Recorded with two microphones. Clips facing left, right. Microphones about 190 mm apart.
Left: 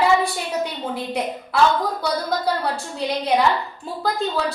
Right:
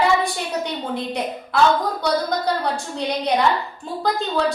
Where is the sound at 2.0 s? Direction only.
5° left (ahead or behind).